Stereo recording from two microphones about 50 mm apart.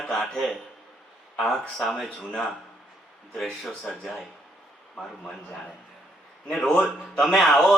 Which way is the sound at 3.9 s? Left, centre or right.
Centre.